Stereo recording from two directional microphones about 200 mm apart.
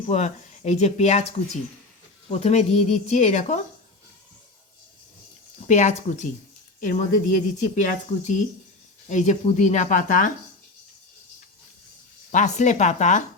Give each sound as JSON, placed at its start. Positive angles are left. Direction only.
{"t": 0.1, "sound": "speech", "side_deg": 35}
{"t": 2.3, "sound": "speech", "side_deg": 35}
{"t": 5.6, "sound": "speech", "side_deg": 35}
{"t": 12.3, "sound": "speech", "side_deg": 40}